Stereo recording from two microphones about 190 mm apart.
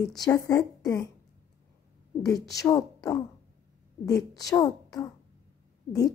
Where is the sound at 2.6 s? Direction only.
20° left (ahead or behind).